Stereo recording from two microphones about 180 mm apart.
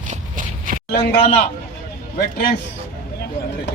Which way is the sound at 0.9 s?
55° left (ahead or behind).